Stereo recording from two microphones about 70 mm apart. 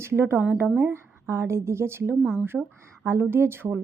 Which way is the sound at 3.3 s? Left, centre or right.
Right.